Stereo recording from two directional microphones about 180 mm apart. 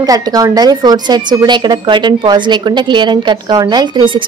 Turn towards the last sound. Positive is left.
turn(degrees=-25)  # may be behind; listen again after turning